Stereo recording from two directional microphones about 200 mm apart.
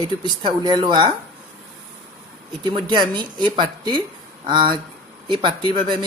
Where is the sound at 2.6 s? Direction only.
20° right (ahead or behind).